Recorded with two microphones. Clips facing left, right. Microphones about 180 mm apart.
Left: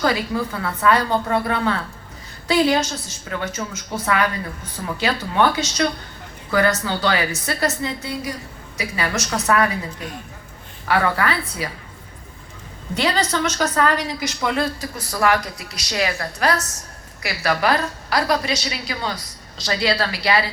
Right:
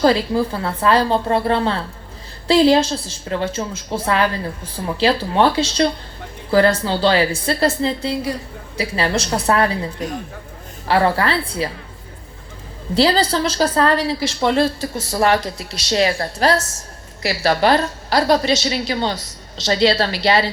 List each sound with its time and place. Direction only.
0.0 s speech: 30° right (ahead or behind)
10.8 s speech: 30° right (ahead or behind)
12.9 s speech: 30° right (ahead or behind)